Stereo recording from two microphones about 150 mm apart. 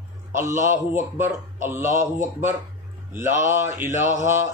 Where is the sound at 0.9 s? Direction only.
15° right (ahead or behind).